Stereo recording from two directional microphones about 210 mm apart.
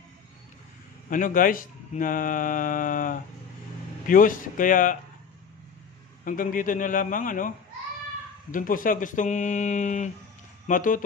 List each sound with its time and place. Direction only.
1.1 s speech: 40° left (ahead or behind)
6.2 s speech: 40° left (ahead or behind)